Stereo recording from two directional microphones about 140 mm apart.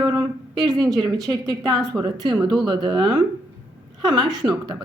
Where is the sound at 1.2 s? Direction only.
30° right (ahead or behind).